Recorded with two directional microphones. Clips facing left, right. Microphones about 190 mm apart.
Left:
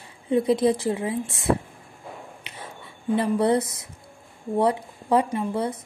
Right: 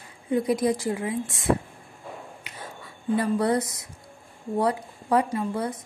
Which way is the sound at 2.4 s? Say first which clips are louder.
Even; 25° left (ahead or behind).